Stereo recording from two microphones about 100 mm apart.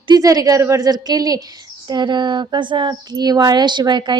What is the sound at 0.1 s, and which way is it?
A woman's voice, 40° right (ahead or behind).